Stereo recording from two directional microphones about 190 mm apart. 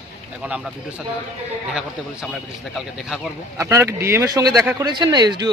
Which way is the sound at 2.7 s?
Centre (ahead or behind).